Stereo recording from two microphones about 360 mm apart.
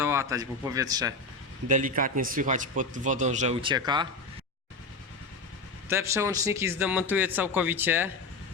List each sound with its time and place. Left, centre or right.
0.0 s speech: centre
1.6 s a man's voice: right
5.9 s a man's voice: centre